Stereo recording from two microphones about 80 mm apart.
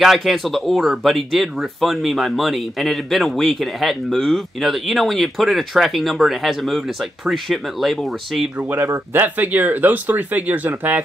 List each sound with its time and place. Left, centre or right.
0.0 s speech: centre
8.7 s speech: right
9.2 s speech: right